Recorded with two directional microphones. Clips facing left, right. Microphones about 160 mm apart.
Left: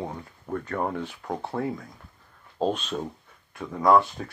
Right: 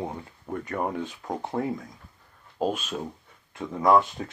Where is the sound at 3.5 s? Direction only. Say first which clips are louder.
Left 1 dB; 20° right (ahead or behind).